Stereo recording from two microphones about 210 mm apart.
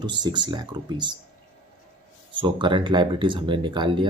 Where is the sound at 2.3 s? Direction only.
25° right (ahead or behind).